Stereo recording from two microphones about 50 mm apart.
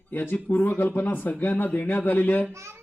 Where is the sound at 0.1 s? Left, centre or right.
Left.